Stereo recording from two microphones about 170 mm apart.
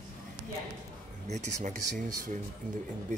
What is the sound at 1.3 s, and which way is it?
Speech, 45° right (ahead or behind).